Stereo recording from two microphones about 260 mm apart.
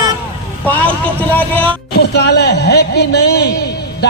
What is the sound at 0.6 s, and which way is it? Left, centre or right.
Speech, centre.